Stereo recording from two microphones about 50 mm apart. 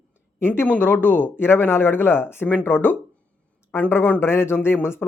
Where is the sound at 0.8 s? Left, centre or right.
Left.